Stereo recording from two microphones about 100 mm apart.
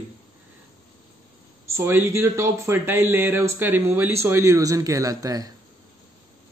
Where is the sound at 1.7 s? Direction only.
25° right (ahead or behind).